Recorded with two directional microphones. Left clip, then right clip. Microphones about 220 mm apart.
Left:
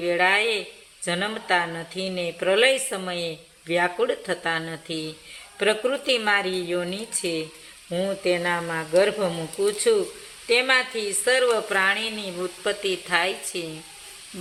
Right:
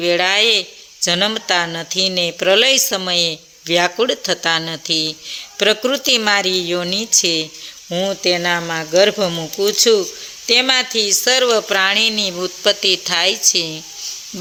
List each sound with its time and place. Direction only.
0.0 s speech: 50° right (ahead or behind)